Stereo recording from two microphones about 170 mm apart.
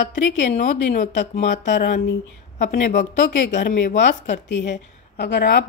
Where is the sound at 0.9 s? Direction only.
50° left (ahead or behind).